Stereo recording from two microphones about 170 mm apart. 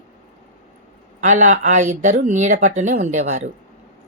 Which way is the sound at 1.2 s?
45° right (ahead or behind).